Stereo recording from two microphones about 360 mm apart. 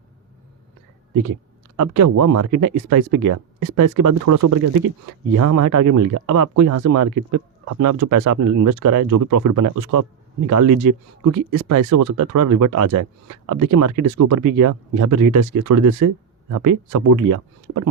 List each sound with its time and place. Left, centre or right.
1.7 s a man's voice: right